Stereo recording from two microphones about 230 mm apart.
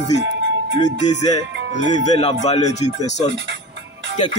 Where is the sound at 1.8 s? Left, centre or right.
Left.